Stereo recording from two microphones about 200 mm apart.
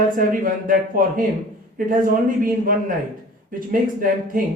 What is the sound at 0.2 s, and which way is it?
Speech, 45° right (ahead or behind).